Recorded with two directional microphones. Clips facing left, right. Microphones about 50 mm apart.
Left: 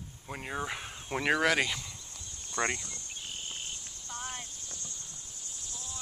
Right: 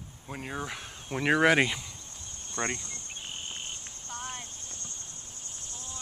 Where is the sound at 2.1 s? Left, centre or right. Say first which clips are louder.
Left 2 dB; right.